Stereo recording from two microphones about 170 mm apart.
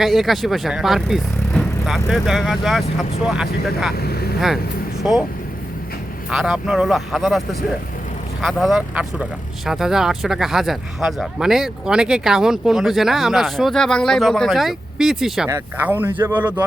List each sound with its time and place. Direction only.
0.0 s speech: centre (ahead or behind)
3.9 s speech: 65° left (ahead or behind)
4.4 s speech: centre (ahead or behind)
6.3 s speech: centre (ahead or behind)
15.4 s speech: 15° right (ahead or behind)